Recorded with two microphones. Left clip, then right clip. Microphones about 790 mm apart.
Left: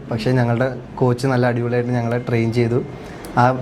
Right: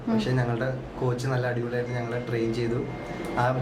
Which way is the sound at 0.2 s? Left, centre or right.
Left.